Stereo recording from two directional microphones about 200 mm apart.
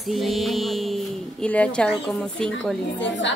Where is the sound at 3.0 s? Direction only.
60° left (ahead or behind).